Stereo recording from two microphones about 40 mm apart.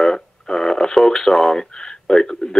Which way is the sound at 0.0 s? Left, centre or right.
Centre.